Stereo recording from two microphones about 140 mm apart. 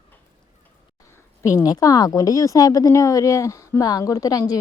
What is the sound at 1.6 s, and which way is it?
Speech, 25° left (ahead or behind).